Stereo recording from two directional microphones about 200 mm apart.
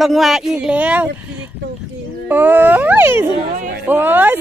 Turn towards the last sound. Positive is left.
turn(degrees=-10)  # may be behind; listen again after turning